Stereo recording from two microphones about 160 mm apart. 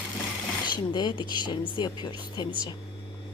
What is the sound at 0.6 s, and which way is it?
Speech, 30° left (ahead or behind).